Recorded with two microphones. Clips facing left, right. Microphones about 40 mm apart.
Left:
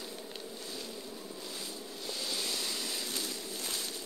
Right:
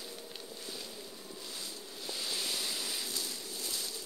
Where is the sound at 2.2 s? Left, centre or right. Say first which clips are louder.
Even; centre.